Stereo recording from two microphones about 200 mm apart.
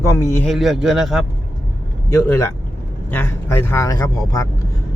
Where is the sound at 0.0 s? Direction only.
15° left (ahead or behind).